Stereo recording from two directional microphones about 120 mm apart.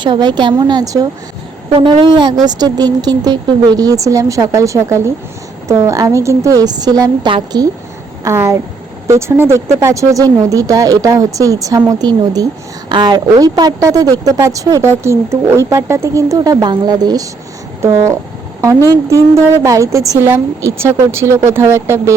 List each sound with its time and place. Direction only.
0.0 s a woman's voice: 40° right (ahead or behind)
1.7 s a woman's voice: 45° right (ahead or behind)
9.0 s a woman's voice: 25° right (ahead or behind)
18.6 s a woman's voice: 25° right (ahead or behind)